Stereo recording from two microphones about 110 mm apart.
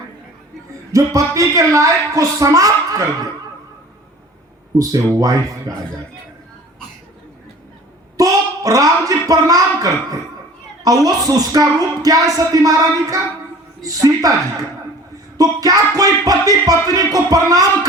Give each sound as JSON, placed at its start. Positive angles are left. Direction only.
{"t": 0.9, "sound": "speech", "side_deg": -30}
{"t": 4.8, "sound": "speech", "side_deg": -30}
{"t": 8.1, "sound": "speech", "side_deg": -30}
{"t": 15.4, "sound": "speech", "side_deg": -35}